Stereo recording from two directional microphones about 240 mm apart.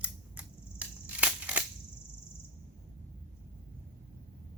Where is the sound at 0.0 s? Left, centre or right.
Centre.